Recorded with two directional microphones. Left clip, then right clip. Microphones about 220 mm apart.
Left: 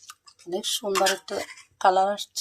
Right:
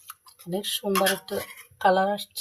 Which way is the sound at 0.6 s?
30° left (ahead or behind).